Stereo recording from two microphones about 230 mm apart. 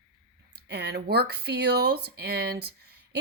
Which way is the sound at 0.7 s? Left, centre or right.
Right.